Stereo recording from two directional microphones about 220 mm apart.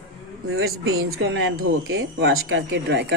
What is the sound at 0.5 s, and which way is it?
Speech, 65° right (ahead or behind).